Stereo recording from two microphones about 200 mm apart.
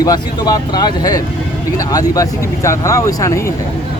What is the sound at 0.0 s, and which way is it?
Speech, 20° left (ahead or behind).